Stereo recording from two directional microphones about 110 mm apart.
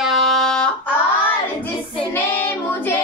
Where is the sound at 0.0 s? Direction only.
Centre (ahead or behind).